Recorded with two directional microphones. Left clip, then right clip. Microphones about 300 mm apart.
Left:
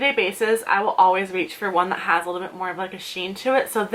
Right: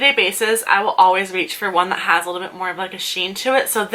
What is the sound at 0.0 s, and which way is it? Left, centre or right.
Speech, centre.